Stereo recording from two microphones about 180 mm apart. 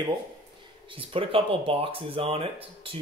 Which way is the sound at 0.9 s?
30° right (ahead or behind).